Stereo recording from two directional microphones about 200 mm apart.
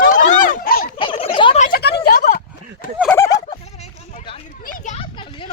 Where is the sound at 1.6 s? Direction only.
50° left (ahead or behind).